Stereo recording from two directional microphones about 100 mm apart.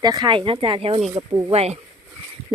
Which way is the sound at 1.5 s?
90° right.